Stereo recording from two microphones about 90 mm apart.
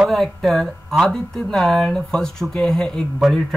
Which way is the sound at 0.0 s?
Centre (ahead or behind).